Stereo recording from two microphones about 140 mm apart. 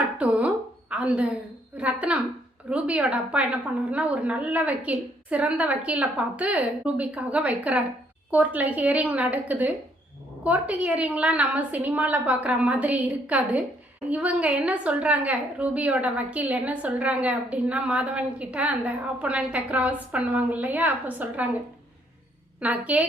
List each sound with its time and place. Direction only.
0.2 s a sound: 10° right (ahead or behind)
2.6 s a woman's voice: 10° right (ahead or behind)
22.6 s a woman's voice: 10° right (ahead or behind)